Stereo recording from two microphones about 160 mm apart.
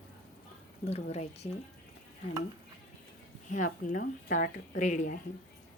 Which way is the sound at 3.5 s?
55° left (ahead or behind).